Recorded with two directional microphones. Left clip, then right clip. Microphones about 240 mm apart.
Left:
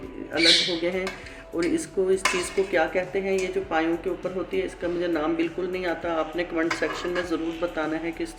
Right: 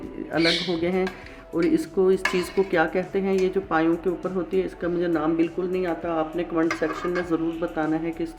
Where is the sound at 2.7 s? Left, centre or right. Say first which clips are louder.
Even; right.